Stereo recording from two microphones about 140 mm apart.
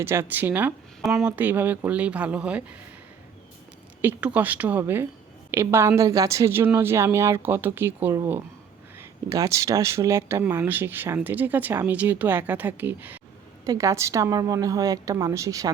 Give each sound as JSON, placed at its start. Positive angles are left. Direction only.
{"t": 0.0, "sound": "speech", "side_deg": -15}
{"t": 4.0, "sound": "a woman's voice", "side_deg": -10}